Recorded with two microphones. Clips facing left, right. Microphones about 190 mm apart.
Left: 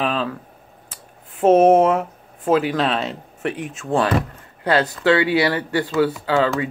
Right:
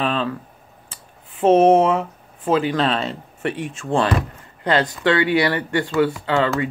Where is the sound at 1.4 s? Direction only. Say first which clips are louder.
Left 1 dB; 5° left (ahead or behind).